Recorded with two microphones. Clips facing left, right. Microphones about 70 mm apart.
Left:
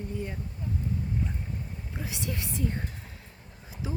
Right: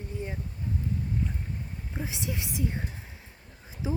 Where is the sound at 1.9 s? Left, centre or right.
Right.